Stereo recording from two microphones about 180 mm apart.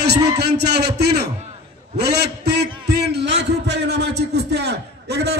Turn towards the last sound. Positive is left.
turn(degrees=-65)  # may be behind; listen again after turning